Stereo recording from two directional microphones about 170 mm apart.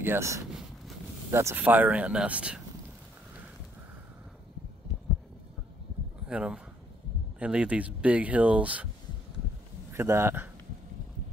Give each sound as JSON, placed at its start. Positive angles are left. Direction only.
{"t": 0.0, "sound": "speech", "side_deg": -15}
{"t": 6.2, "sound": "speech", "side_deg": -5}
{"t": 9.9, "sound": "speech", "side_deg": -15}